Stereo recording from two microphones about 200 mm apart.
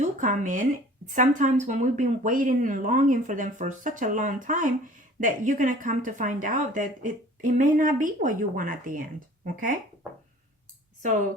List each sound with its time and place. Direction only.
0.0 s speech: 40° right (ahead or behind)